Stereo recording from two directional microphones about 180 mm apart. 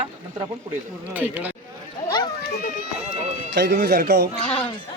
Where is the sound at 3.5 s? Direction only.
65° right (ahead or behind).